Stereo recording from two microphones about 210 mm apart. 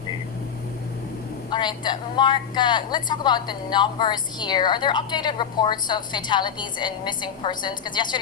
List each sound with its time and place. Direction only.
1.5 s a woman's voice: 20° left (ahead or behind)